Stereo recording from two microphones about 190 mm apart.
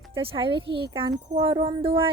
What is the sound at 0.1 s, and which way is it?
Speech, 25° right (ahead or behind).